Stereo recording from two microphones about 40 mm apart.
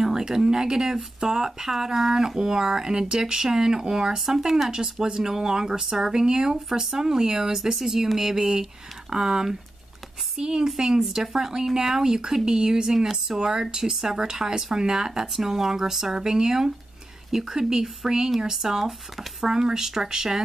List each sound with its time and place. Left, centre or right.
0.0 s speech: centre